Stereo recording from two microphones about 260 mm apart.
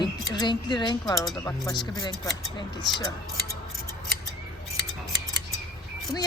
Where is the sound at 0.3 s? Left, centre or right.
Centre.